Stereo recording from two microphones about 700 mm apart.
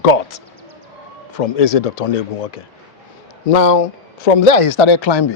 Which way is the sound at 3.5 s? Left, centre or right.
Left.